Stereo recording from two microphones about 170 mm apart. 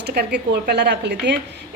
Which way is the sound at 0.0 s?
70° right (ahead or behind).